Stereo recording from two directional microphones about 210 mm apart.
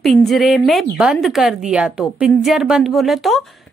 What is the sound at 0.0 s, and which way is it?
A woman's voice, centre (ahead or behind).